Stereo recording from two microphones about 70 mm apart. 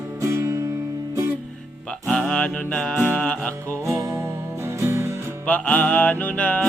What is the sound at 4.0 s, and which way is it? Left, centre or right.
Music, right.